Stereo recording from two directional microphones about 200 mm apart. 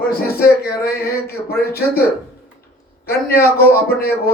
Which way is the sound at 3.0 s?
50° left (ahead or behind).